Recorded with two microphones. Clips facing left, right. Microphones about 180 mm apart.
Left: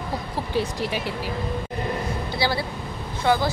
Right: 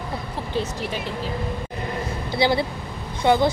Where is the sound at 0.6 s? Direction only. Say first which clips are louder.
Left 1 dB; 10° left (ahead or behind).